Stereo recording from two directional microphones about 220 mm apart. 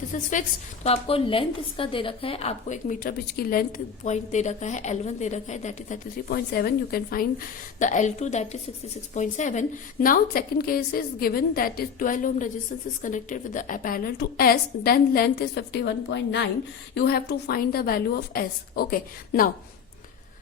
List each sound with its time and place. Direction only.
0.1 s a woman's voice: 35° left (ahead or behind)